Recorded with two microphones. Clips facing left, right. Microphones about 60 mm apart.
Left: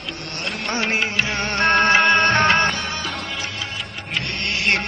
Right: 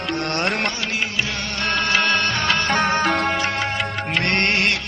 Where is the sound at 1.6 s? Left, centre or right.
Left.